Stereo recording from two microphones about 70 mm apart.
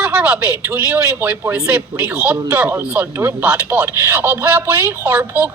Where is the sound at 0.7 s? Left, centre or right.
Right.